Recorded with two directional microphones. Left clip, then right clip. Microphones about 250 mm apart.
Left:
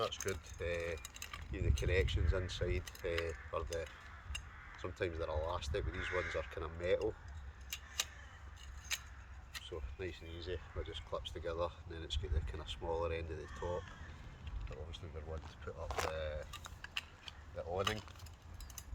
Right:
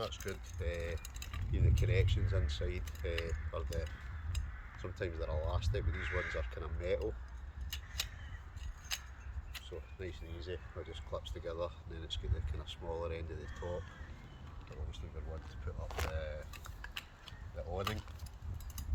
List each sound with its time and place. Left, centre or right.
0.0 s speech: centre
9.6 s speech: centre
15.9 s speech: left
16.1 s a sound: centre
17.7 s speech: centre